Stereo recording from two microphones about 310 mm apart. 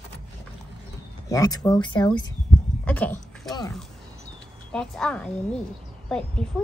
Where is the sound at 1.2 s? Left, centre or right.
Centre.